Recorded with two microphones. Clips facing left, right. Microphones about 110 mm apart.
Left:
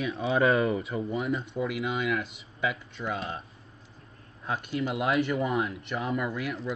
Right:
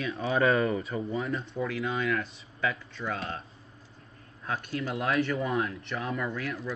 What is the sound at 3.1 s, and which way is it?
Speech, 10° left (ahead or behind).